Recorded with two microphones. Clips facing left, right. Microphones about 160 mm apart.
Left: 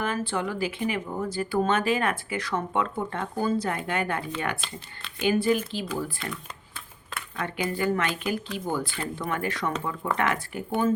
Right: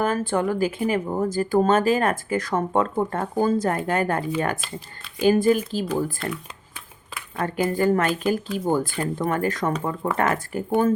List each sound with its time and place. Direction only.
0.0 s speech: 45° right (ahead or behind)
7.3 s speech: 40° right (ahead or behind)